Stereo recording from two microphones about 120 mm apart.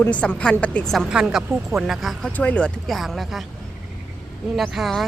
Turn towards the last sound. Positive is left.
turn(degrees=0)  # may be behind; listen again after turning